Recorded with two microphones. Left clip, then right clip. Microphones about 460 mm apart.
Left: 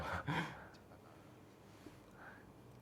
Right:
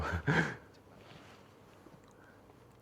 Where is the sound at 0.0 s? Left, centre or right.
Right.